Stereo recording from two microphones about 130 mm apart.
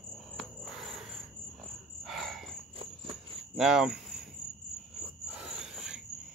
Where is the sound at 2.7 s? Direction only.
45° right (ahead or behind).